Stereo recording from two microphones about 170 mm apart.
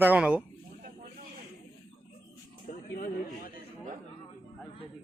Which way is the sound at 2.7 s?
55° left (ahead or behind).